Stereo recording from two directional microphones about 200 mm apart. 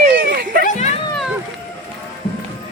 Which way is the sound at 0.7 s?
35° left (ahead or behind).